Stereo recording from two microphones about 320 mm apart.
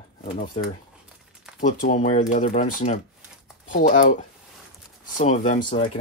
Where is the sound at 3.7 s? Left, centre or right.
Left.